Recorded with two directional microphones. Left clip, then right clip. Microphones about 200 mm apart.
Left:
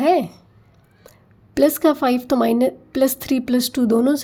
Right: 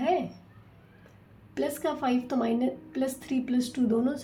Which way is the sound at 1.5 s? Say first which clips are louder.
Left 14 dB; 60° left (ahead or behind).